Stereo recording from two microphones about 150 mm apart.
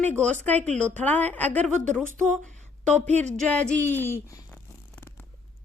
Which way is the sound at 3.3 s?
5° left (ahead or behind).